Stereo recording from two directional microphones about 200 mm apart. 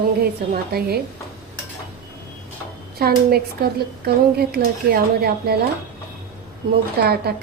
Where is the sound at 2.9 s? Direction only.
50° right (ahead or behind).